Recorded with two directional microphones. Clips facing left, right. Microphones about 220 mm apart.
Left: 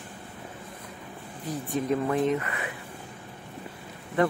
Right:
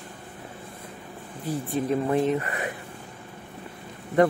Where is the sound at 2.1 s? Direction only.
35° right (ahead or behind).